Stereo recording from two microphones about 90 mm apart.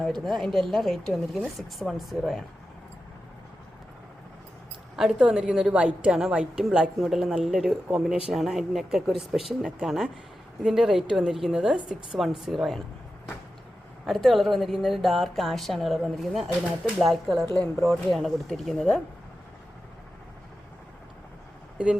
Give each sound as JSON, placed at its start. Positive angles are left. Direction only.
{"t": 0.0, "sound": "a man's voice", "side_deg": 0}
{"t": 4.9, "sound": "a woman's voice", "side_deg": -5}
{"t": 14.1, "sound": "a man's voice", "side_deg": 0}